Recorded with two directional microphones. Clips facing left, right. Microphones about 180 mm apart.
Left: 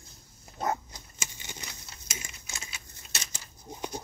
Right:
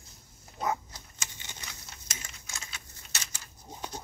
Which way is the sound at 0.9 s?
10° left (ahead or behind).